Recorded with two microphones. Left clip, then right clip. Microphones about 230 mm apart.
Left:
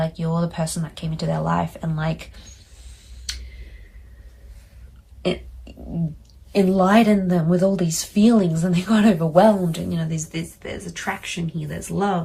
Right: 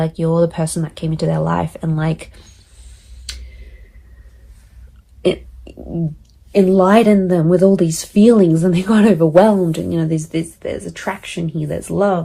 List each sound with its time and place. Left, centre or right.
0.0 s speech: right
5.2 s burping: right
6.7 s speech: right
10.3 s speech: centre